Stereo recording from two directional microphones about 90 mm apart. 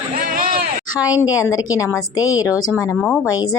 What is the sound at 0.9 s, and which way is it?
A woman's voice, 40° left (ahead or behind).